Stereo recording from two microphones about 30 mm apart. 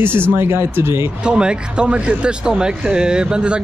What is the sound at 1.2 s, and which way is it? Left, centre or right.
Speech, right.